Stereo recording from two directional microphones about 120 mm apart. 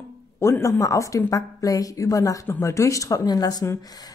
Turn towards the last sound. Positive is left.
turn(degrees=25)  # may be behind; listen again after turning